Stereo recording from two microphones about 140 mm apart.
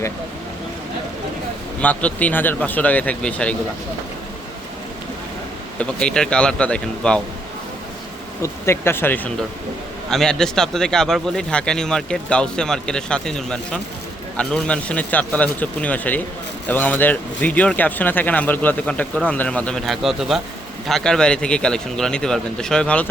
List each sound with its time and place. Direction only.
1.8 s speech: 10° left (ahead or behind)
5.8 s speech: 5° left (ahead or behind)
8.4 s speech: 20° left (ahead or behind)